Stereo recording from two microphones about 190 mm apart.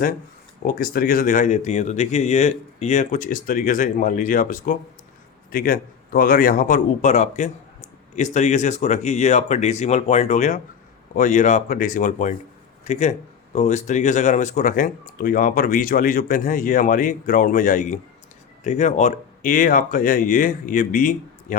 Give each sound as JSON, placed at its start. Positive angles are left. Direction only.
{"t": 0.6, "sound": "a man's voice", "side_deg": 50}